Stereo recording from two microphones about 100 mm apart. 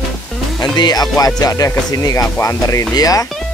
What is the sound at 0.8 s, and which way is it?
Speech, 40° left (ahead or behind).